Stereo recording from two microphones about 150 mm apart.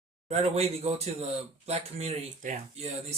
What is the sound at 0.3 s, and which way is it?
Speech, 45° right (ahead or behind).